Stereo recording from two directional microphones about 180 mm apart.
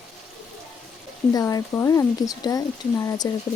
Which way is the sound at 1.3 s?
20° left (ahead or behind).